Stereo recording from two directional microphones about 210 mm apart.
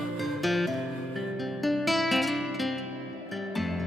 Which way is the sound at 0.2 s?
Centre (ahead or behind).